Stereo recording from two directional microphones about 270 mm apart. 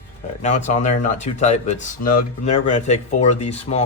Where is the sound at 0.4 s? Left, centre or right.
Left.